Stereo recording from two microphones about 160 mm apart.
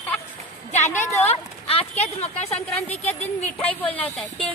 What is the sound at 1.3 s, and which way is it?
Speech, 40° left (ahead or behind).